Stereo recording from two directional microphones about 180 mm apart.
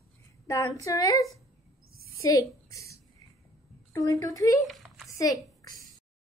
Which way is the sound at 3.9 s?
20° left (ahead or behind).